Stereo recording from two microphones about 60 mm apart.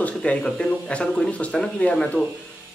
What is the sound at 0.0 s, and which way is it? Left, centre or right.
Speech, left.